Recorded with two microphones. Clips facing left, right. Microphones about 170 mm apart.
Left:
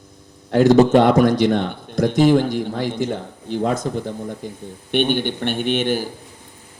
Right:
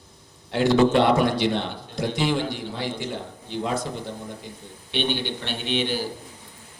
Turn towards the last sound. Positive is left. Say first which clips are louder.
# left 6 dB
turn(degrees=50)  # may be behind; listen again after turning